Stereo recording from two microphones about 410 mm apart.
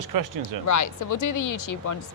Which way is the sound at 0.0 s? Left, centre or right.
Right.